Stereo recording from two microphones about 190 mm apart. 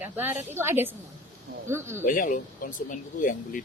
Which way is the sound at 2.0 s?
45° left (ahead or behind).